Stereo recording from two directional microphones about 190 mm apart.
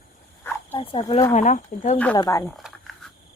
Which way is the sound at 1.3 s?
40° left (ahead or behind).